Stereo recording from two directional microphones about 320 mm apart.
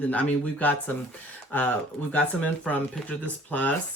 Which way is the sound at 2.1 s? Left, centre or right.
Centre.